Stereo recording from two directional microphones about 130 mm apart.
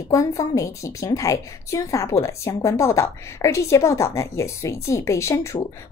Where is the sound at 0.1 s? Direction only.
25° left (ahead or behind).